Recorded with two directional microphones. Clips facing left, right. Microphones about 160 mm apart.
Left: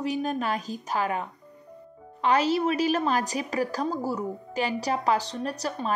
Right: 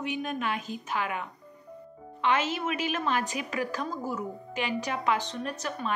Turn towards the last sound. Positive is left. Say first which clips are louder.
# left 3 dB
turn(degrees=35)  # may be behind; listen again after turning